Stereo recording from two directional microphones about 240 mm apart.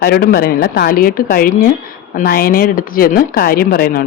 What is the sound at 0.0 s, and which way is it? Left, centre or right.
Speech, left.